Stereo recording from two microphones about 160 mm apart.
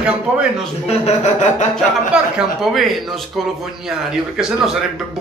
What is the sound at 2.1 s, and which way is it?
A man's voice, 5° right (ahead or behind).